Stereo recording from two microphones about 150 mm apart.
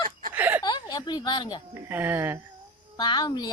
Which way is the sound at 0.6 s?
25° left (ahead or behind).